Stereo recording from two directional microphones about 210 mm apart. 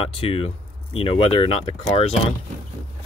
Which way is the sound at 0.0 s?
25° left (ahead or behind).